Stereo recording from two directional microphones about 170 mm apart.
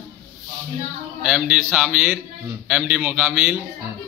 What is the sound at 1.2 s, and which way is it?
A man's voice, 5° right (ahead or behind).